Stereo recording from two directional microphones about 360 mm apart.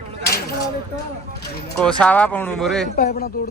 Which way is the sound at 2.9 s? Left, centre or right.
Left.